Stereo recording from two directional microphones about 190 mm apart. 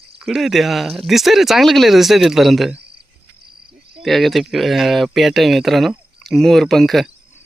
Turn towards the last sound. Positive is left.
turn(degrees=0)  # may be behind; listen again after turning